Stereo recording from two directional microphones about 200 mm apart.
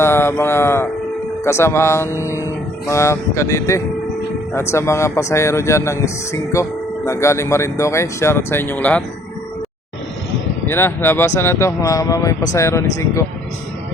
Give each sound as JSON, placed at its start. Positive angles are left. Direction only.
{"t": 0.0, "sound": "speech", "side_deg": 10}
{"t": 10.7, "sound": "speech", "side_deg": 10}